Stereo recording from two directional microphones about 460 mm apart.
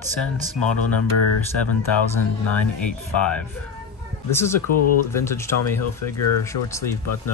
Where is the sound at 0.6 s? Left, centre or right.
Left.